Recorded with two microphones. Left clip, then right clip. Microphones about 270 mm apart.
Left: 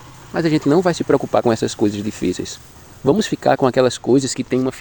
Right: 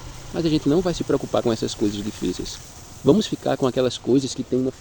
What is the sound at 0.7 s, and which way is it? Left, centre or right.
Speech, centre.